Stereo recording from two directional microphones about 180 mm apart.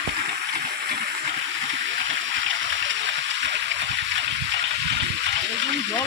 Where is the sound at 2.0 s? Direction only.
90° right.